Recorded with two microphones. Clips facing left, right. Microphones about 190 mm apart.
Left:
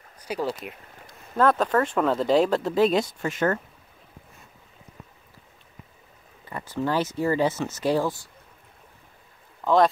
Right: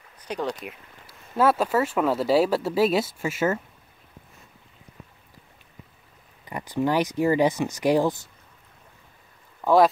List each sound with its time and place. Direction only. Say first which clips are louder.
0.2 s speech: left 1 dB; 5° left (ahead or behind)
6.5 s speech: right 2 dB; 15° right (ahead or behind)
9.6 s speech: right 2 dB; 15° right (ahead or behind)